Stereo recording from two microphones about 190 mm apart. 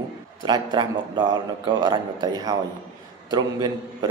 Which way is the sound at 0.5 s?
25° right (ahead or behind).